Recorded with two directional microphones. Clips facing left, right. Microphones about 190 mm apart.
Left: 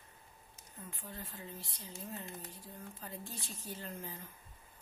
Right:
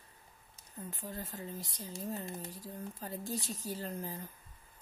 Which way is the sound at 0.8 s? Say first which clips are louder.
Right 5 dB; 40° right (ahead or behind).